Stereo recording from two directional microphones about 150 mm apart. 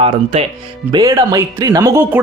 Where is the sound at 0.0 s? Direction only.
45° right (ahead or behind).